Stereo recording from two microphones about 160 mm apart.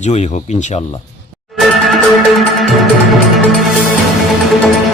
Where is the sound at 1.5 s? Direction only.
Centre (ahead or behind).